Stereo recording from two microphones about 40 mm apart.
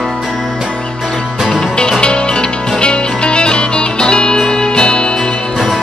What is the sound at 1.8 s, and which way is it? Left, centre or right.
Music, left.